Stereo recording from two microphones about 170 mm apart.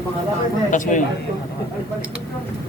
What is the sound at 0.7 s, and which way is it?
Speech, 50° left (ahead or behind).